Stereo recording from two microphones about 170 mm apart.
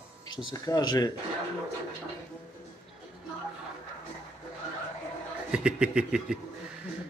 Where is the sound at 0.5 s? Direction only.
25° left (ahead or behind).